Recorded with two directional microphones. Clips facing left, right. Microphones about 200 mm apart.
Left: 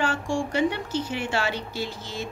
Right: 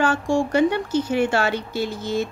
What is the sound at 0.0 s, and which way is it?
Speech, 45° right (ahead or behind).